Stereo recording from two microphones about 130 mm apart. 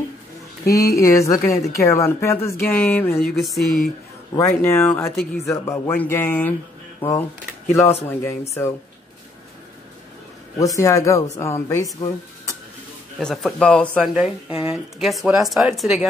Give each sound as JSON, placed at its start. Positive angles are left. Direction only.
{"t": 0.7, "sound": "speech", "side_deg": 25}
{"t": 3.2, "sound": "speech", "side_deg": 5}
{"t": 4.4, "sound": "speech", "side_deg": 20}
{"t": 10.6, "sound": "speech", "side_deg": 25}
{"t": 13.2, "sound": "speech", "side_deg": 5}
{"t": 14.0, "sound": "speech", "side_deg": -5}